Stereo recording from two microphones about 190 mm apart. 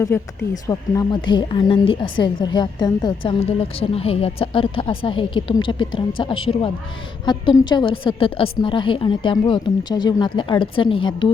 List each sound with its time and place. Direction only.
0.1 s a woman's voice: 15° left (ahead or behind)